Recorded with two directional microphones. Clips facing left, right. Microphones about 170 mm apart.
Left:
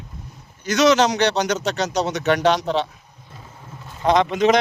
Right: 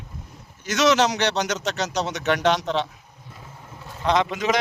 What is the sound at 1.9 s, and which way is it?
Speech, 35° left (ahead or behind).